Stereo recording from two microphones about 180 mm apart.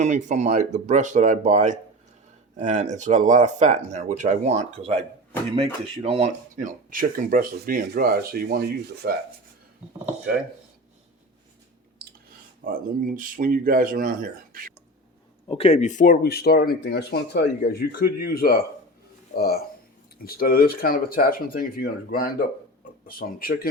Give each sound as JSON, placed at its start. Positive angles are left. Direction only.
{"t": 0.0, "sound": "speech", "side_deg": -40}
{"t": 12.0, "sound": "clicking", "side_deg": -60}
{"t": 12.6, "sound": "speech", "side_deg": -50}
{"t": 15.5, "sound": "speech", "side_deg": 35}
{"t": 20.2, "sound": "speech", "side_deg": 55}